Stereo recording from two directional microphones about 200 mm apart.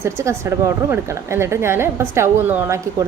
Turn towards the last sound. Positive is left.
turn(degrees=-10)  # may be behind; listen again after turning